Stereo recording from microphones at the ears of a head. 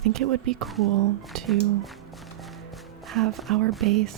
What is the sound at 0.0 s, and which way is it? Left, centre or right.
Speech, right.